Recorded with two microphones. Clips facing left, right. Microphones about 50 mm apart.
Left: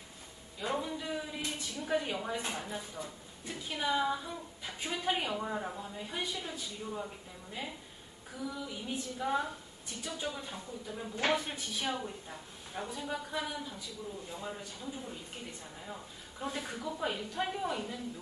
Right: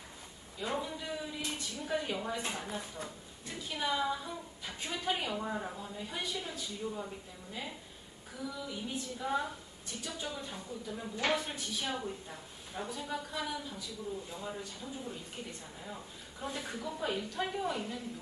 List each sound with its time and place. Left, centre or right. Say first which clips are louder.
0.6 s a woman's voice: left 1 dB; centre
3.0 s speech: left 1 dB; right
3.4 s a woman's voice: left 1 dB; centre
8.4 s a woman's voice: even; centre
11.2 s a woman's voice: left 1 dB; centre
11.9 s a woman's voice: even; centre
16.6 s a woman's voice: right 1 dB; centre